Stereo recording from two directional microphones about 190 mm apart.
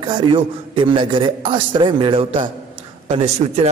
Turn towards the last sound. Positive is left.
turn(degrees=-35)  # may be behind; listen again after turning